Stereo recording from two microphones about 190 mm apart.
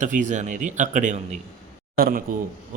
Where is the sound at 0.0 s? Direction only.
40° right (ahead or behind).